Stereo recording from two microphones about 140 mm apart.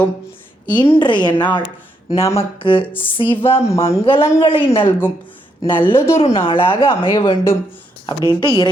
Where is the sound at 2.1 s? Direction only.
45° left (ahead or behind).